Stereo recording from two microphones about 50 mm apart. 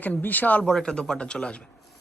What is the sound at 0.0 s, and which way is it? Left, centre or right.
Speech, left.